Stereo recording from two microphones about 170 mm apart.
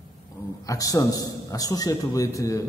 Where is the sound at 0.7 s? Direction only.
20° left (ahead or behind).